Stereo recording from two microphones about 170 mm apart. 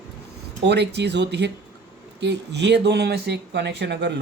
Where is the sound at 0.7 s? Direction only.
80° right.